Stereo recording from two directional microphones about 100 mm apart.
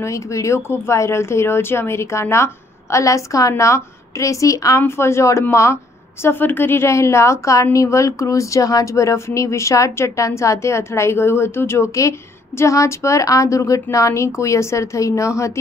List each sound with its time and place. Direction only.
0.0 s a woman's voice: 30° left (ahead or behind)